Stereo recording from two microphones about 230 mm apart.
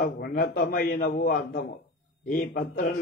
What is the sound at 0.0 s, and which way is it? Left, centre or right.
Speech, left.